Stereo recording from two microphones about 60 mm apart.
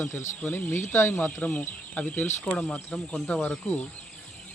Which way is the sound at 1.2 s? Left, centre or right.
Left.